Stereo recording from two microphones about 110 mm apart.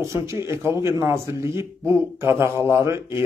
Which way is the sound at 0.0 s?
25° right (ahead or behind).